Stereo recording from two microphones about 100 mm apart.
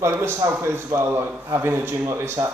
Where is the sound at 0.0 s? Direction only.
25° right (ahead or behind).